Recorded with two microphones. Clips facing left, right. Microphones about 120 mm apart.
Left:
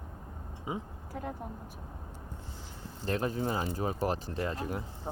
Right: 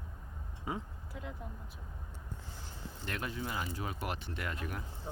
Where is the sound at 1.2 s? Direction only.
50° left (ahead or behind).